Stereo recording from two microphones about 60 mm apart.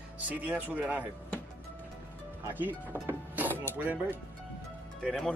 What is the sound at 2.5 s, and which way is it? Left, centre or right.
Speech, right.